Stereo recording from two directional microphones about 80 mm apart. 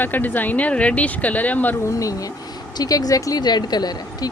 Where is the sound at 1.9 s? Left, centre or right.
Left.